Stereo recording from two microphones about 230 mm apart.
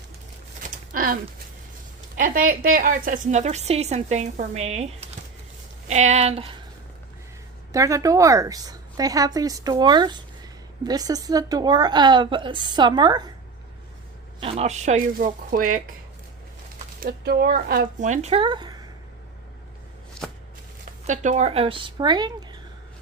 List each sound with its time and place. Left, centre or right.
0.9 s a woman's voice: right
7.7 s a woman's voice: centre
14.4 s a woman's voice: right
20.2 s shuffling cards: centre
21.1 s speech: right